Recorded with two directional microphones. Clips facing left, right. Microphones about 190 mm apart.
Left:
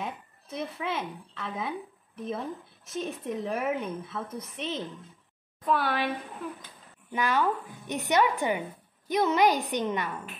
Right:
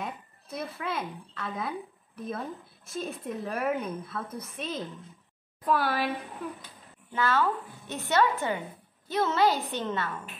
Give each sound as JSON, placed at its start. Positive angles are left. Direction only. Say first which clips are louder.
{"t": 0.6, "sound": "speech", "louder": "left 1 dB", "side_deg": 0}
{"t": 5.7, "sound": "speech", "louder": "even", "side_deg": 0}
{"t": 7.1, "sound": "a woman's voice", "louder": "even", "side_deg": 15}